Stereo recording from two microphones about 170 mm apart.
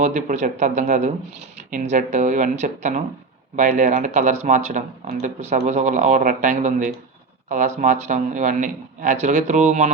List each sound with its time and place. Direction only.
0.0 s speech: 45° right (ahead or behind)